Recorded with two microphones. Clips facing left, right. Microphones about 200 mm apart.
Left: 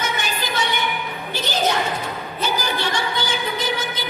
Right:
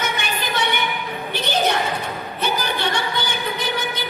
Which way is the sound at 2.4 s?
60° right (ahead or behind).